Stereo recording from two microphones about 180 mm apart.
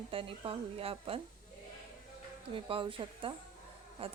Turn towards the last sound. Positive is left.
turn(degrees=-30)  # may be behind; listen again after turning